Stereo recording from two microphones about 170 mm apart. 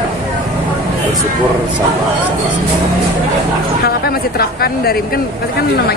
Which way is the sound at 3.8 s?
65° left (ahead or behind).